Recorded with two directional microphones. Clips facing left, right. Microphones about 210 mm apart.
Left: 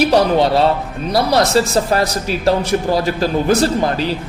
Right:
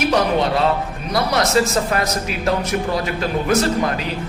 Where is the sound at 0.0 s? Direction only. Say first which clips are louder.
Left 5 dB; 35° left (ahead or behind).